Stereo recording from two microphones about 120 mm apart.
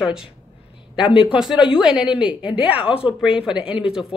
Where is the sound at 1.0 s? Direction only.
45° left (ahead or behind).